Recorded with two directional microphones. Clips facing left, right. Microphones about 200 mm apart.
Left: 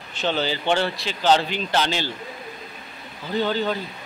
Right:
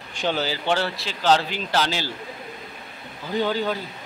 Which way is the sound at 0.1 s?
10° right (ahead or behind).